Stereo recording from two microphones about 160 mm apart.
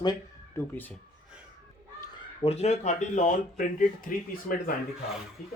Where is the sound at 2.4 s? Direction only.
40° left (ahead or behind).